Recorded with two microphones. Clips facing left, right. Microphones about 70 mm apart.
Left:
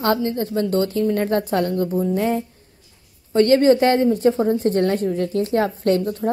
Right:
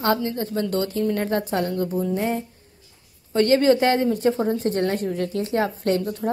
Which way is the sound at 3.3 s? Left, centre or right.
Left.